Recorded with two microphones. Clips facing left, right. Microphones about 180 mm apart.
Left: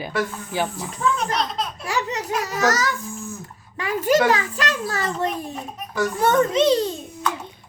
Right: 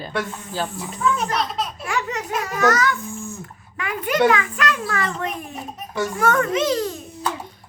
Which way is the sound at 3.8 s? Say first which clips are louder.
Left 1 dB; 35° left (ahead or behind).